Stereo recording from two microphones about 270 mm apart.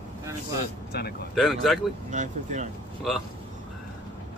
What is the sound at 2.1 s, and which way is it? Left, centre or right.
Speech, right.